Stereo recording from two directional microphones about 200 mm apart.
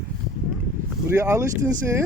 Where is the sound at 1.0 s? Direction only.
15° right (ahead or behind).